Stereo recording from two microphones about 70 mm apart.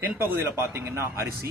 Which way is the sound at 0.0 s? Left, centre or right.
Right.